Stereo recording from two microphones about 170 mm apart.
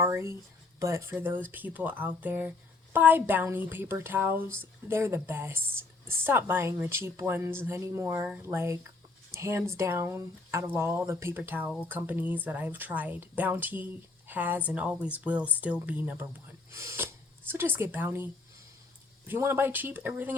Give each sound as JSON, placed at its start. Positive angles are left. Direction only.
{"t": 0.0, "sound": "speech", "side_deg": -15}
{"t": 19.3, "sound": "speech", "side_deg": -15}